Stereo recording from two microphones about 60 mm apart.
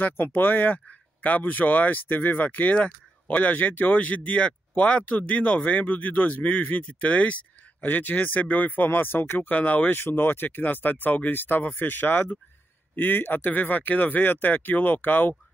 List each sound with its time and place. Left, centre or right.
0.0 s speech: left